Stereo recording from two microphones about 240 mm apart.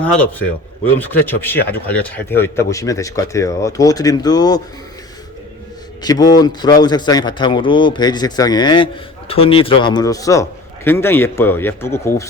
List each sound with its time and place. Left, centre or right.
0.0 s a man's voice: centre
6.0 s a man's voice: centre